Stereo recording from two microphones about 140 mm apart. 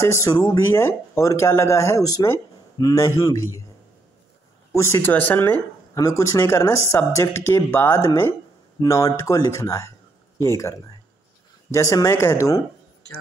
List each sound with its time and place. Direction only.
0.0 s speech: 20° left (ahead or behind)
4.7 s speech: 20° left (ahead or behind)